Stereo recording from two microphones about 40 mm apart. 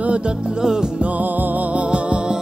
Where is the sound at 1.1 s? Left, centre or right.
Right.